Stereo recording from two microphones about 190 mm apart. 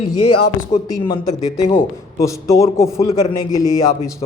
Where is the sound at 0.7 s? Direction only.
25° left (ahead or behind).